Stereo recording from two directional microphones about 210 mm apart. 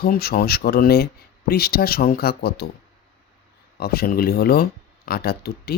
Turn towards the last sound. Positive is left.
turn(degrees=50)  # may be behind; listen again after turning